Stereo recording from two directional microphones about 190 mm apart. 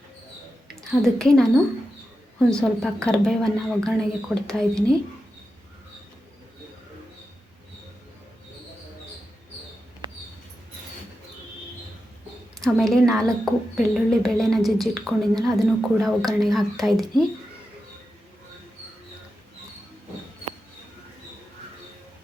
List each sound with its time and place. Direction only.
0.9 s a woman's voice: centre (ahead or behind)
2.5 s a woman's voice: 5° left (ahead or behind)
10.0 s mouse: 25° right (ahead or behind)
12.5 s a woman's voice: centre (ahead or behind)